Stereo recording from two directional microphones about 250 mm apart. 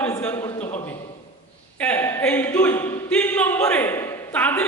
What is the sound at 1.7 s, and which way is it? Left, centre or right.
Speech, centre.